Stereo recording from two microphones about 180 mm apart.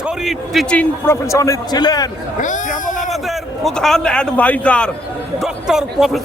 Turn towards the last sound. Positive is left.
turn(degrees=0)  # may be behind; listen again after turning